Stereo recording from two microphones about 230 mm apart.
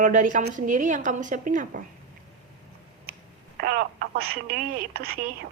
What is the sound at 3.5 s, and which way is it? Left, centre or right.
Speech, right.